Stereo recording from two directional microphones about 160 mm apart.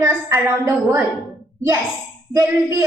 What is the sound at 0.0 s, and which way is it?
A woman's voice, 15° right (ahead or behind).